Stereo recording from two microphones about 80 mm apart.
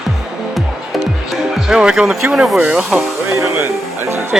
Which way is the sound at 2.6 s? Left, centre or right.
Centre.